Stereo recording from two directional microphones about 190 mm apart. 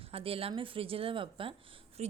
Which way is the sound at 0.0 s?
30° right (ahead or behind).